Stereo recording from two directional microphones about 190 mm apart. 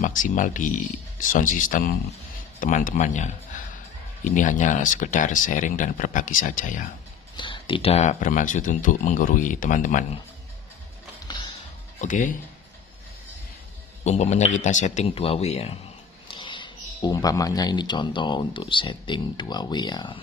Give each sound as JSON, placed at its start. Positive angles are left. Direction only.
{"t": 0.0, "sound": "speech", "side_deg": 45}
{"t": 7.3, "sound": "speech", "side_deg": 25}
{"t": 11.2, "sound": "music", "side_deg": 25}
{"t": 12.0, "sound": "speech", "side_deg": 40}
{"t": 14.0, "sound": "speech", "side_deg": 35}